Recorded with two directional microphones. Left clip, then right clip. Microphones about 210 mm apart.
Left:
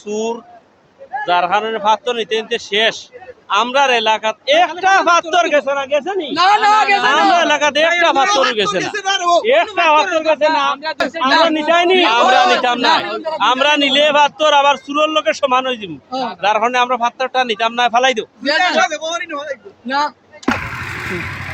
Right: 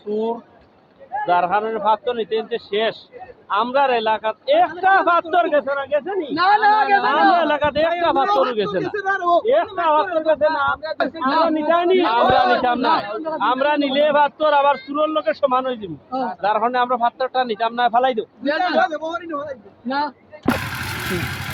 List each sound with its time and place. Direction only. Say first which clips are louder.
0.1 s a man's voice: left 2 dB; 25° left (ahead or behind)
7.3 s a man's voice: left 4 dB; 20° left (ahead or behind)
8.3 s a man's voice: left 4 dB; 40° left (ahead or behind)
8.5 s a man's voice: left 5 dB; 25° left (ahead or behind)
8.8 s a man's voice: left 4 dB; 40° left (ahead or behind)
9.4 s a man's voice: left 5 dB; 25° left (ahead or behind)
11.5 s a man's voice: left 4 dB; 25° left (ahead or behind)
18.4 s a man's voice: left 5 dB; 45° left (ahead or behind)
20.7 s vehicle: left 2 dB; 40° right (ahead or behind)